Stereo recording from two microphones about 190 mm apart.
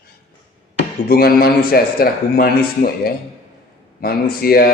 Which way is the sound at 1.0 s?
55° left (ahead or behind).